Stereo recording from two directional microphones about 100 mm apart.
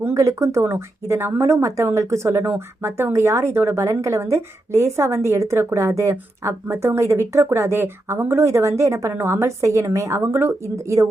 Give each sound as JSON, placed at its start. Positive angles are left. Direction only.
{"t": 0.0, "sound": "speech", "side_deg": -30}